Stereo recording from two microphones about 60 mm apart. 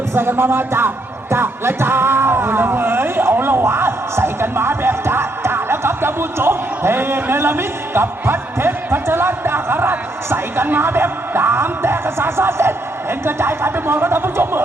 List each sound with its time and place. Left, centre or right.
0.1 s speech: right